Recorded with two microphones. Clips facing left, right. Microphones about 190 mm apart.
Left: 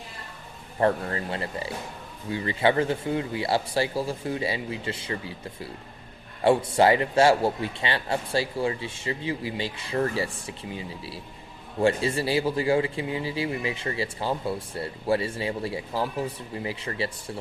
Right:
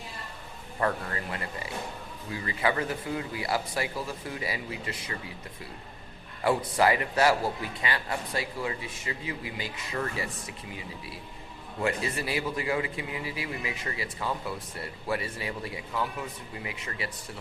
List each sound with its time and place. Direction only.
0.8 s a man's voice: 30° left (ahead or behind)
6.4 s a man's voice: 25° left (ahead or behind)